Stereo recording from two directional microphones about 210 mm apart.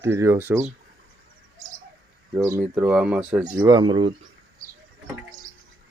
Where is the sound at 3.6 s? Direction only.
20° right (ahead or behind).